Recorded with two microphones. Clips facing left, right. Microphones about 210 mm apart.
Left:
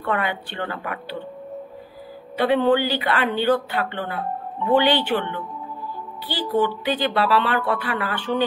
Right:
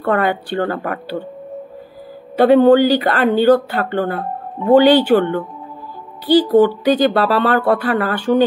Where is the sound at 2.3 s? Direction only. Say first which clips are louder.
Right 9 dB; 45° right (ahead or behind).